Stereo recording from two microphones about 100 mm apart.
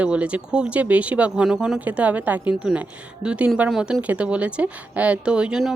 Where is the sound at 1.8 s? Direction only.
15° right (ahead or behind).